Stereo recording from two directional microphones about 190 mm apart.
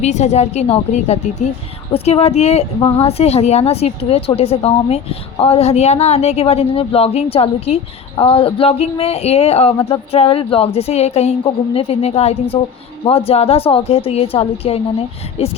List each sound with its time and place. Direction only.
0.0 s a woman's voice: 35° left (ahead or behind)